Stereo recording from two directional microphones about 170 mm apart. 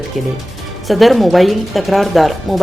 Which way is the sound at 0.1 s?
Centre (ahead or behind).